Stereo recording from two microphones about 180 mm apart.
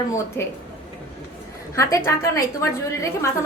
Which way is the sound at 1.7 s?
15° left (ahead or behind).